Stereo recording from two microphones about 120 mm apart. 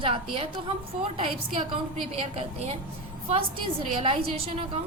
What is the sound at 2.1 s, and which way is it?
Speech, 60° right (ahead or behind).